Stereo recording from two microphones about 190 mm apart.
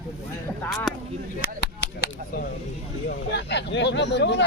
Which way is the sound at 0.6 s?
5° left (ahead or behind).